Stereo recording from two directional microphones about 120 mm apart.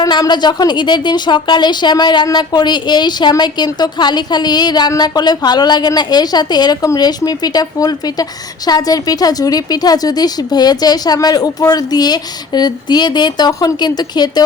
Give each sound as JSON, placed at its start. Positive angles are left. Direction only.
{"t": 0.0, "sound": "a woman's voice", "side_deg": 35}